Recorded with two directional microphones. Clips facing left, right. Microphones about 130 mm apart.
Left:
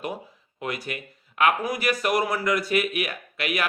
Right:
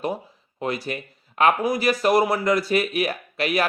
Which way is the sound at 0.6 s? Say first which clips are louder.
Right 4 dB; 30° right (ahead or behind).